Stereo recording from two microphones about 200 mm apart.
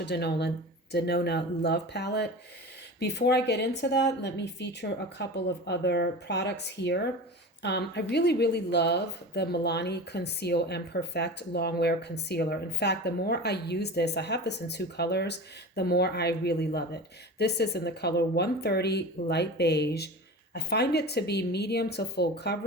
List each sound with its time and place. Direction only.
0.0 s speech: 55° left (ahead or behind)